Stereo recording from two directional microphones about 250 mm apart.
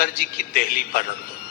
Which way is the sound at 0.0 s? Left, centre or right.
Left.